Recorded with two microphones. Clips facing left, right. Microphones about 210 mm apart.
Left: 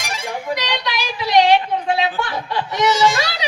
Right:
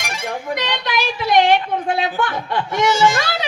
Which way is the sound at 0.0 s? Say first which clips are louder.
Even; 55° right (ahead or behind).